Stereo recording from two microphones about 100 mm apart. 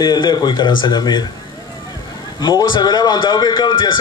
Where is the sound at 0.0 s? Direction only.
50° left (ahead or behind).